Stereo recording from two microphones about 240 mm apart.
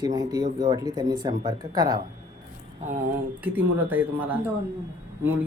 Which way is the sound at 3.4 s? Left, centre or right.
Centre.